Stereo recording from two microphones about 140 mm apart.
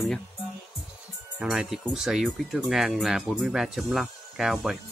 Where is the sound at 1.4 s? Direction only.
5° right (ahead or behind).